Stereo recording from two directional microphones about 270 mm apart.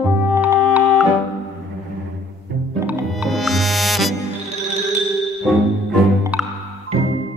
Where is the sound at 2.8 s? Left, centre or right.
Centre.